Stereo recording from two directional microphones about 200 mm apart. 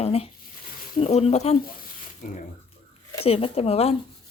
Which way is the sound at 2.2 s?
45° left (ahead or behind).